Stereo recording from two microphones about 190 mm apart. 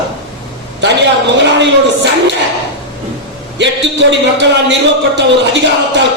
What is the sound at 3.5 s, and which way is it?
Speech, 70° right (ahead or behind).